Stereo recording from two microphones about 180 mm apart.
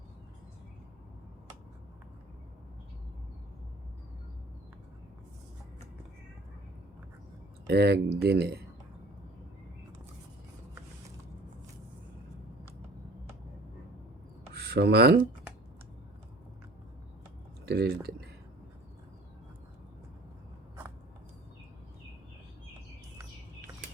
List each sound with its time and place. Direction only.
7.7 s speech: 65° right (ahead or behind)
14.5 s speech: 65° right (ahead or behind)
17.7 s speech: 60° right (ahead or behind)